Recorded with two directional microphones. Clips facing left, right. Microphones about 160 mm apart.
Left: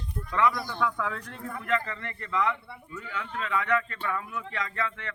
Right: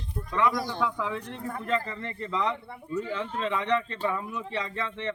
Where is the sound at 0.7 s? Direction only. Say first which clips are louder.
Right 1 dB; 20° right (ahead or behind).